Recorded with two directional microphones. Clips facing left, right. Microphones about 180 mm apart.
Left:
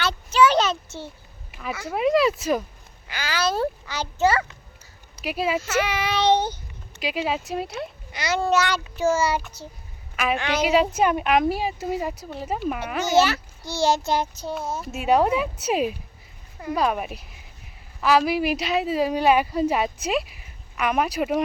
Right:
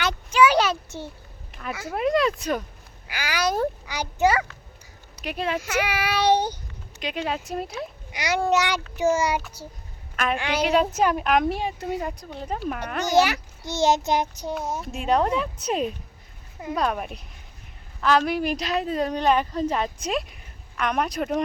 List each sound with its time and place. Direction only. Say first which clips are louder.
0.0 s a sound: even; 15° right (ahead or behind)
1.5 s a sound: left 2 dB; 5° left (ahead or behind)
1.8 s a woman's voice: left 2 dB; centre (ahead or behind)
3.1 s a child's voice: even; 15° right (ahead or behind)
5.2 s speech: left 3 dB; 5° left (ahead or behind)
5.5 s a child's voice: left 2 dB; 10° right (ahead or behind)
7.0 s a woman's voice: left 2 dB; 5° left (ahead or behind)
8.1 s a child's voice: even; 15° right (ahead or behind)
10.6 s a woman's voice: left 1 dB; 5° left (ahead or behind)
13.1 s a child's voice: even; 15° right (ahead or behind)
14.8 s a woman's voice: left 3 dB; 5° left (ahead or behind)